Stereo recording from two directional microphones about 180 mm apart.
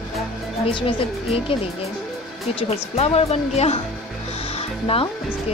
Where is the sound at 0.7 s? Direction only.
30° left (ahead or behind).